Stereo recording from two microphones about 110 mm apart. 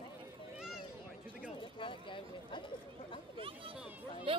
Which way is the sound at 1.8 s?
50° left (ahead or behind).